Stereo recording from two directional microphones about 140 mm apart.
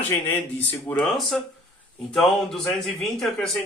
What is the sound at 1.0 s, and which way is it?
Speech, centre (ahead or behind).